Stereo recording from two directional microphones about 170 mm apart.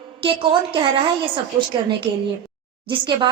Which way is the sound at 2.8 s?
25° right (ahead or behind).